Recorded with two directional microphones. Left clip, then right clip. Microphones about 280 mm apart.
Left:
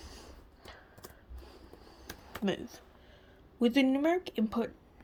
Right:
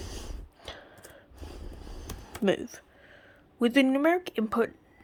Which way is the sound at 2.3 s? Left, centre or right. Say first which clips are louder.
Right 8 dB; centre.